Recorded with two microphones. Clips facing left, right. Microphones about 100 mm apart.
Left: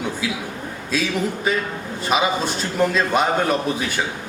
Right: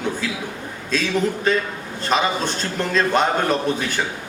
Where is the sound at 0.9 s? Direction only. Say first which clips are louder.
Right 2 dB; 10° left (ahead or behind).